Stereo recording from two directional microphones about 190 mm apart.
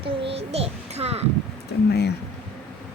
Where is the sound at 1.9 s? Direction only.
60° left (ahead or behind).